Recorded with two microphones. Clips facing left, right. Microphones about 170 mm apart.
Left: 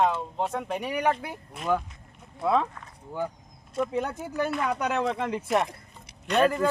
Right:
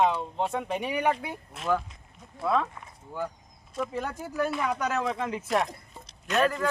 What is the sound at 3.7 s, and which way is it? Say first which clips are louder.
Speech: left 4 dB; centre (ahead or behind).